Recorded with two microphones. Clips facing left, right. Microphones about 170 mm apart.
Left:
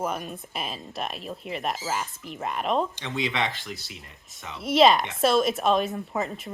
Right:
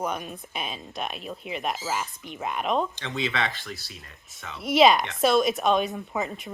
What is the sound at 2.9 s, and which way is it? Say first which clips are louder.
Speech: even; 15° left (ahead or behind).